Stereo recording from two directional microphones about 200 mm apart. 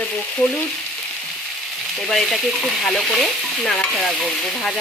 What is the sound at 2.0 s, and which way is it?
Speech, centre (ahead or behind).